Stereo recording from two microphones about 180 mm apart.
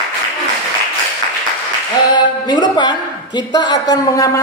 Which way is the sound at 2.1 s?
25° left (ahead or behind).